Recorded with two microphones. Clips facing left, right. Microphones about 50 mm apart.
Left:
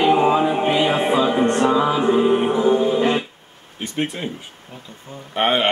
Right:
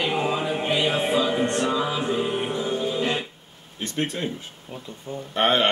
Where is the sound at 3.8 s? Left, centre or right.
Centre.